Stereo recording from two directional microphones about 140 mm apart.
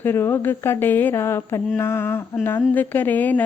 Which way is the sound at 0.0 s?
15° left (ahead or behind).